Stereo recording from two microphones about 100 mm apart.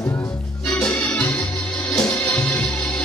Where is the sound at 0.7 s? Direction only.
10° left (ahead or behind).